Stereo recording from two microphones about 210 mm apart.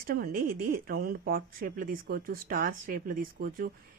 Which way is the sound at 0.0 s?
45° right (ahead or behind).